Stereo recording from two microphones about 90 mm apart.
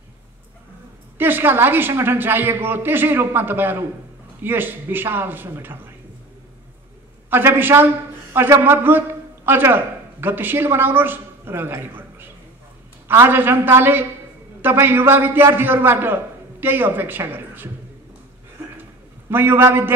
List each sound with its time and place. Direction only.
1.1 s a man's voice: 25° right (ahead or behind)
7.2 s a man's voice: 25° right (ahead or behind)
13.3 s a man's voice: 25° right (ahead or behind)
19.2 s a man's voice: 25° right (ahead or behind)